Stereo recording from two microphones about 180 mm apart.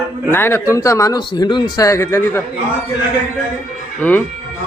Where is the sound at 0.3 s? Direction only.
15° left (ahead or behind).